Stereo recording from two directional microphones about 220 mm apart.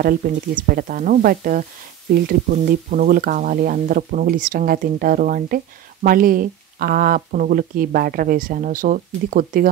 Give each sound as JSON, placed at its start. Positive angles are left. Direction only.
{"t": 0.0, "sound": "speech", "side_deg": -40}